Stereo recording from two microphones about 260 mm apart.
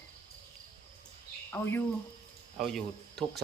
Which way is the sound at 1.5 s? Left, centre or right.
Centre.